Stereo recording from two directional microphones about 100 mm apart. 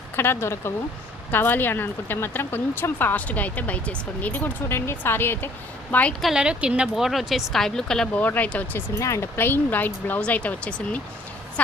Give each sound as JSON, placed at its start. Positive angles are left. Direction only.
{"t": 0.2, "sound": "a woman's voice", "side_deg": 25}
{"t": 6.2, "sound": "speech", "side_deg": -10}
{"t": 9.0, "sound": "speech", "side_deg": 30}